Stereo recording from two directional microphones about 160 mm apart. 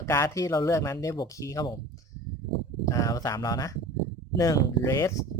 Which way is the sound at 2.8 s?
20° left (ahead or behind).